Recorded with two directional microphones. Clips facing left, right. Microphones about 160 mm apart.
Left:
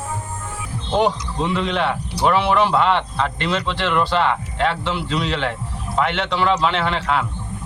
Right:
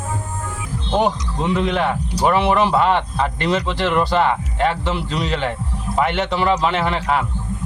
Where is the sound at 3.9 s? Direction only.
40° right (ahead or behind).